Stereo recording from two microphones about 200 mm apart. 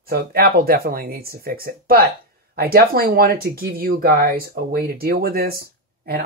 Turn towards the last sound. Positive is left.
turn(degrees=-50)  # may be behind; listen again after turning